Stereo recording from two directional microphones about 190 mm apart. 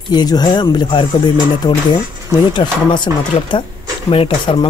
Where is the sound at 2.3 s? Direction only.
25° left (ahead or behind).